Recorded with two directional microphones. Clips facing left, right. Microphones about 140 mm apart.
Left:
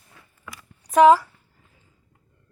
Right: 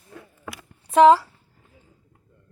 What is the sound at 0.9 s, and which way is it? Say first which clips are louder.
Speech: even; 25° right (ahead or behind).